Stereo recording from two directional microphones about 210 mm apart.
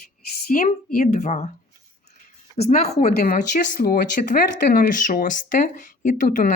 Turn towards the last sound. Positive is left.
turn(degrees=35)  # may be behind; listen again after turning